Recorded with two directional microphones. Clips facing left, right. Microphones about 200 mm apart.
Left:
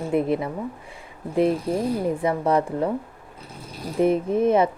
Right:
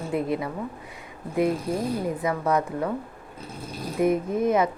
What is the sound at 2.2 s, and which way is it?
Speech, 30° left (ahead or behind).